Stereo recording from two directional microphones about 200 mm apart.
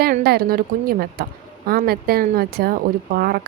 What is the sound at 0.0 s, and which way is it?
Speech, 50° right (ahead or behind).